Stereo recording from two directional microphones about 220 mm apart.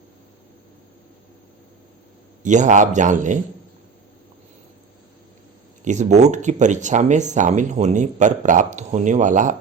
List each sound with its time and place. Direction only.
2.4 s speech: 35° right (ahead or behind)
5.8 s speech: 35° right (ahead or behind)